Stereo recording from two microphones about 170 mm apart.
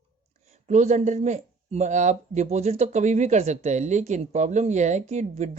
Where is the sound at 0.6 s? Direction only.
45° right (ahead or behind).